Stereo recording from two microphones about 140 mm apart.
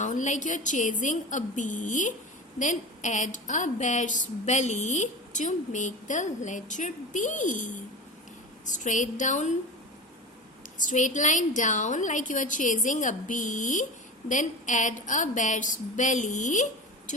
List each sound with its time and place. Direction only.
0.0 s a woman's voice: 60° left (ahead or behind)
8.7 s a woman's voice: 65° left (ahead or behind)
10.8 s a woman's voice: 65° left (ahead or behind)